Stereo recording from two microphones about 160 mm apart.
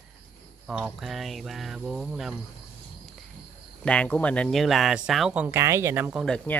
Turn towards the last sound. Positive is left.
turn(degrees=-10)  # may be behind; listen again after turning